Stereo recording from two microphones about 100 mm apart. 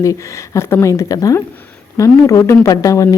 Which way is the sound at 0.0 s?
30° left (ahead or behind).